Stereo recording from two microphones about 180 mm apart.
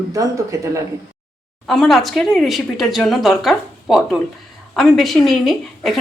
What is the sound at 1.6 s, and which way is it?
A woman's voice, centre (ahead or behind).